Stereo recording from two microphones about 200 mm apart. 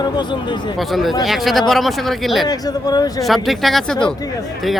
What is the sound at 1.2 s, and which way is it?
Speech, centre (ahead or behind).